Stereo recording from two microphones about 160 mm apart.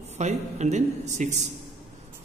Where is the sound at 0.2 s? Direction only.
45° right (ahead or behind).